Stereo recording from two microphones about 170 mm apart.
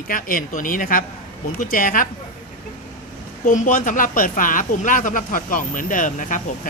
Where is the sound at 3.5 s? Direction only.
50° left (ahead or behind).